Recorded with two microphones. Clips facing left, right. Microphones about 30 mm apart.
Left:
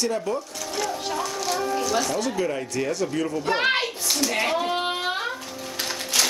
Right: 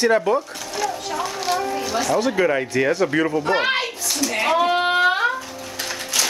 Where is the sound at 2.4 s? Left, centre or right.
Right.